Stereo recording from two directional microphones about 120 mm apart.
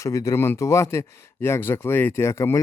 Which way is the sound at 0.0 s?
25° left (ahead or behind).